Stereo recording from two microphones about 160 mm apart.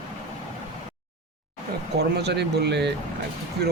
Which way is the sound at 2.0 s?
90° right.